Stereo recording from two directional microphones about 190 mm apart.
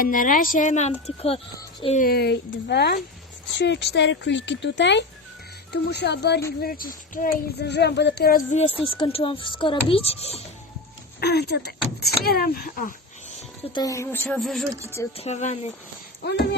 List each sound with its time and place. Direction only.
0.0 s speech: 45° left (ahead or behind)
2.0 s speech: 55° left (ahead or behind)
6.6 s speech: 50° left (ahead or behind)
8.9 s a child's voice: 25° left (ahead or behind)
11.2 s speech: 60° left (ahead or behind)
13.7 s speech: 15° left (ahead or behind)
15.1 s speech: 35° left (ahead or behind)
16.2 s speech: 60° left (ahead or behind)